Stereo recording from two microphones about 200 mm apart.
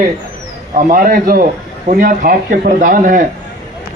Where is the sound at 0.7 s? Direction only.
45° right (ahead or behind).